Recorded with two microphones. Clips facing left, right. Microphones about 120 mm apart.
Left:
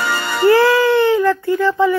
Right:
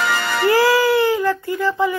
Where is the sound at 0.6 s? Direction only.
35° right (ahead or behind).